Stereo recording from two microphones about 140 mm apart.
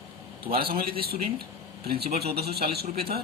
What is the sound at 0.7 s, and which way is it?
Speech, 90° right.